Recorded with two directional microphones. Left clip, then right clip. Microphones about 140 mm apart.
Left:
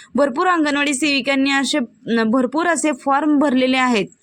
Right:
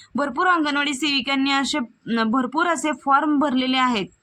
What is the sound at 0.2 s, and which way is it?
Speech, 50° left (ahead or behind).